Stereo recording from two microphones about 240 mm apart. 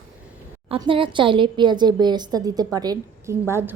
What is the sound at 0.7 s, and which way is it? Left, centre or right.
A woman's voice, right.